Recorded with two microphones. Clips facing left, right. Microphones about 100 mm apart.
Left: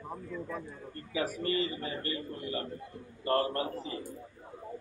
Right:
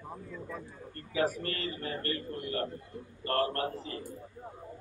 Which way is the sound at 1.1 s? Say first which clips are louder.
Even; 15° left (ahead or behind).